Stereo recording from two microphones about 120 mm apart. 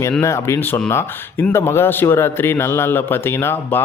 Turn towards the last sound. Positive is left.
turn(degrees=20)  # may be behind; listen again after turning